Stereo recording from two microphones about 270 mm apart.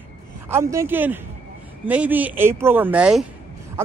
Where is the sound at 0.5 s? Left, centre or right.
Centre.